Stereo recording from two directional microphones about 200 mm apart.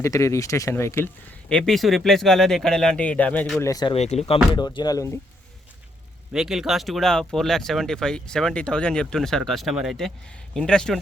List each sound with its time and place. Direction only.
0.0 s speech: 15° left (ahead or behind)
3.6 s speech: 20° left (ahead or behind)
3.9 s speech: 30° left (ahead or behind)
4.5 s speech: 20° left (ahead or behind)
6.3 s speech: centre (ahead or behind)